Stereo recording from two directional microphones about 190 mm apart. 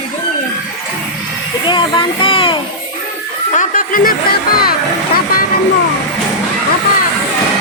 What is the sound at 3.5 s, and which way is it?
Speech, 45° left (ahead or behind).